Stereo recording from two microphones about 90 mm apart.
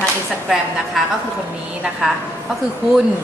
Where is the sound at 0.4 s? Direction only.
Centre (ahead or behind).